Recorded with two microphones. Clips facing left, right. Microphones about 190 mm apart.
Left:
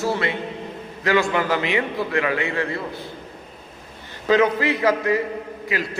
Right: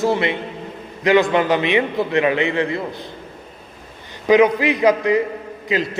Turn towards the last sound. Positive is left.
turn(degrees=-20)  # may be behind; listen again after turning